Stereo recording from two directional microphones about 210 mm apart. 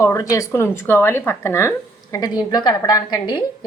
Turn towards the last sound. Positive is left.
turn(degrees=20)  # may be behind; listen again after turning